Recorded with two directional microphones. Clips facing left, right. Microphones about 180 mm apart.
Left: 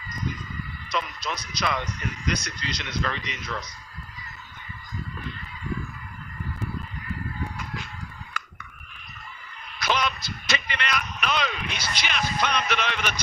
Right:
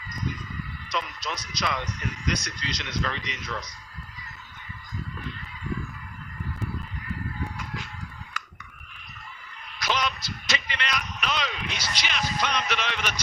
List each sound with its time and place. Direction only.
0.9 s speech: 55° left (ahead or behind)
8.4 s a sound: 55° left (ahead or behind)
9.7 s a man's voice: 55° left (ahead or behind)